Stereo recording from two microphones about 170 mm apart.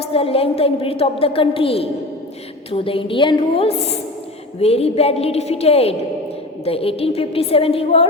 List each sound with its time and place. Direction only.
0.0 s a woman's voice: 35° left (ahead or behind)